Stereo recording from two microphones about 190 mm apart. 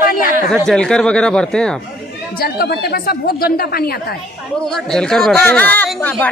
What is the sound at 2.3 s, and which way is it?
A woman's voice, 55° left (ahead or behind).